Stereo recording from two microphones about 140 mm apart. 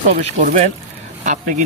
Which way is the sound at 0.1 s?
60° right (ahead or behind).